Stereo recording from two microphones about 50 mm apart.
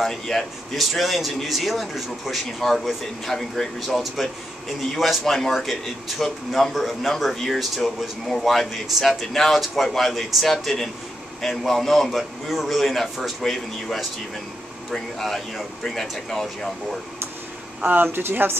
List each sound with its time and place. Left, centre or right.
0.0 s speech: centre
17.8 s speech: right